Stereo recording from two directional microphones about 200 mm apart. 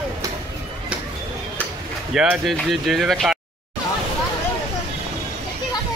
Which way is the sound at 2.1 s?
5° right (ahead or behind).